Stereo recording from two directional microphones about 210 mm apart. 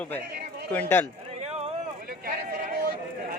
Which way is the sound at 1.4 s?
30° right (ahead or behind).